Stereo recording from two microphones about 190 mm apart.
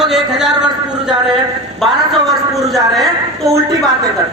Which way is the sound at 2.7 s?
15° right (ahead or behind).